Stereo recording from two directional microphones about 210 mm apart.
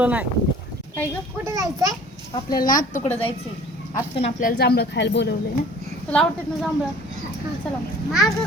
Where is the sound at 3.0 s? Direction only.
25° left (ahead or behind); by 5.4 s 55° left (ahead or behind).